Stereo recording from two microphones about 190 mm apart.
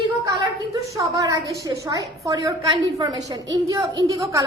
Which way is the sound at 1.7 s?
20° right (ahead or behind).